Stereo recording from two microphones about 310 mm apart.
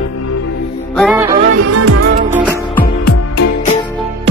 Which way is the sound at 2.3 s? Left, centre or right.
Centre.